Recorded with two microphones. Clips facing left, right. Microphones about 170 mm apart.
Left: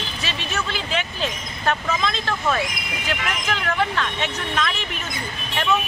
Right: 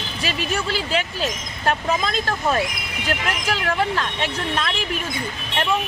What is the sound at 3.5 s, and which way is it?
Speech, 35° right (ahead or behind).